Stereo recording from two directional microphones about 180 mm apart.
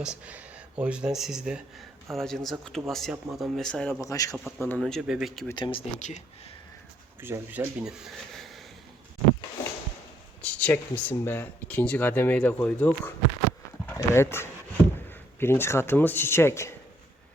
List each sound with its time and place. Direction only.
0.0 s speech: 5° right (ahead or behind)
4.0 s a man's voice: 20° left (ahead or behind)
4.6 s speech: 5° left (ahead or behind)
5.5 s a man's voice: 25° left (ahead or behind)
6.0 s speech: 40° left (ahead or behind)
7.2 s speech: 15° right (ahead or behind)
10.4 s speech: 10° left (ahead or behind)